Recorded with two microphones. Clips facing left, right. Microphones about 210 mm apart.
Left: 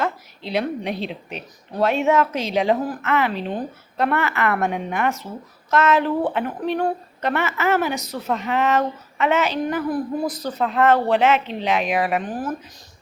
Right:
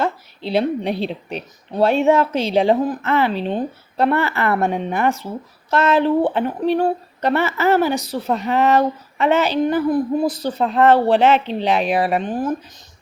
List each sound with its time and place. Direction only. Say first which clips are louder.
0.0 s speech: right 3 dB; 30° right (ahead or behind)